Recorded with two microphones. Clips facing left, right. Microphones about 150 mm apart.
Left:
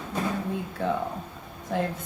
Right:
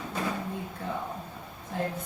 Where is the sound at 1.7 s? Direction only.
85° left.